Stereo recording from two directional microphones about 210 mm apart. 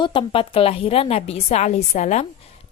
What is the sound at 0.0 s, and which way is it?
A woman's voice, 25° left (ahead or behind).